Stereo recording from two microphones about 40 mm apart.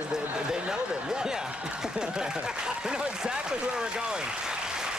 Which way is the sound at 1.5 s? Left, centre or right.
Right.